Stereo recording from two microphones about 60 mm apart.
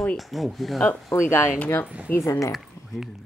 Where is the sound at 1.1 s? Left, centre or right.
Left.